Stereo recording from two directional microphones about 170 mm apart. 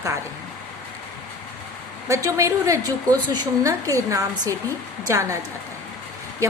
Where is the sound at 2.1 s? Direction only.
20° right (ahead or behind).